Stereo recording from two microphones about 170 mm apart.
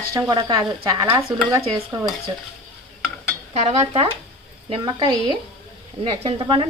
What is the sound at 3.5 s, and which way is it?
Stir, 35° right (ahead or behind).